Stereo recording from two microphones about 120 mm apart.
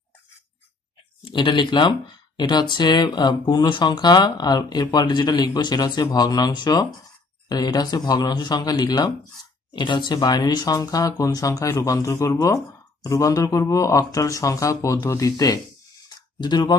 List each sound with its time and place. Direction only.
1.2 s speech: 40° left (ahead or behind)